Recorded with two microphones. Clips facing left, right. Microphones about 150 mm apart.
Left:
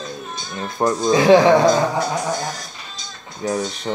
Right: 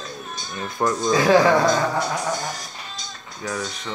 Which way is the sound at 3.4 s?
35° left (ahead or behind).